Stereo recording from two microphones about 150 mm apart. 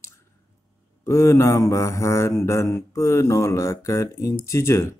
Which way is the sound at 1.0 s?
20° left (ahead or behind).